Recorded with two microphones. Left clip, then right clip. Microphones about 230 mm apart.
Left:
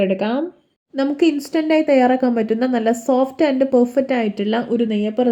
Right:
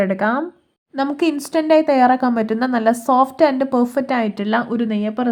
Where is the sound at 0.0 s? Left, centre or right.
Centre.